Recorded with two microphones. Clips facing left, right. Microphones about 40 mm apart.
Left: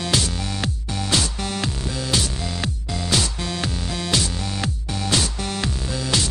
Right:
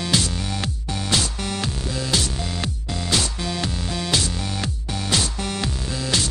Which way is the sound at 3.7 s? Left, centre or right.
Centre.